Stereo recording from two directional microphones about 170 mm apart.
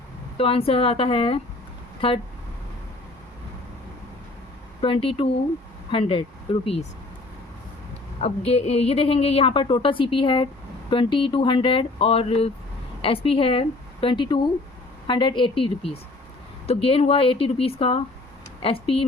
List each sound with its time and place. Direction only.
0.3 s a woman's voice: 35° left (ahead or behind)
4.8 s a woman's voice: 30° left (ahead or behind)
8.2 s a woman's voice: 35° left (ahead or behind)